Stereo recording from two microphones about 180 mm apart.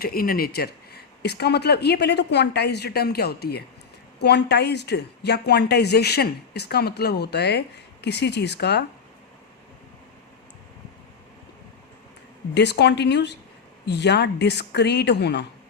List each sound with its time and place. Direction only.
0.0 s a woman's voice: 55° left (ahead or behind)
12.5 s a woman's voice: 70° left (ahead or behind)